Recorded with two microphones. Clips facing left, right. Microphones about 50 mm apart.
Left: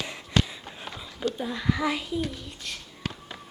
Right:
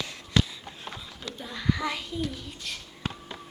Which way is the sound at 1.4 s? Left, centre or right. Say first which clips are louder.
Even; centre.